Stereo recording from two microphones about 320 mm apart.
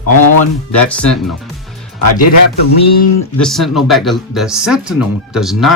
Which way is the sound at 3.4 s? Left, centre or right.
Centre.